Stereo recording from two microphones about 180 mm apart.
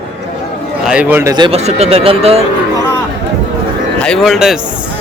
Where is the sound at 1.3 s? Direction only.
25° right (ahead or behind).